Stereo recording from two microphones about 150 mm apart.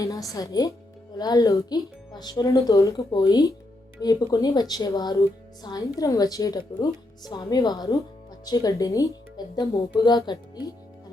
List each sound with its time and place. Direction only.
0.0 s a woman's voice: 20° left (ahead or behind)